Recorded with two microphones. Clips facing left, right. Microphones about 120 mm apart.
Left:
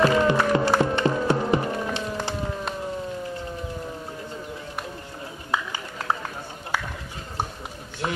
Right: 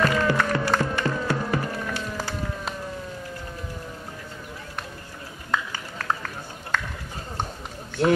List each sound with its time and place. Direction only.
0.0 s music: 20° left (ahead or behind)
5.5 s a sound: 15° left (ahead or behind)
6.7 s clip-clop: 10° left (ahead or behind)